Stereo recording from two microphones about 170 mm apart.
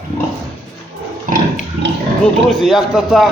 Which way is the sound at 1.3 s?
50° right (ahead or behind).